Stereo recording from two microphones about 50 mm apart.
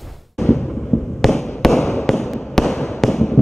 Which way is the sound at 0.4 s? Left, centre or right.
Centre.